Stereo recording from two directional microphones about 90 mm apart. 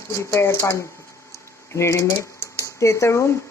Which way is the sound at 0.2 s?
30° left (ahead or behind).